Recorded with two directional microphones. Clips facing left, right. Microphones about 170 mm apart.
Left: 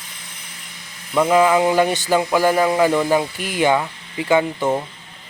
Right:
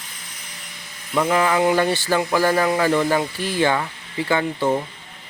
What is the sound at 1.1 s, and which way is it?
Speech, 10° left (ahead or behind).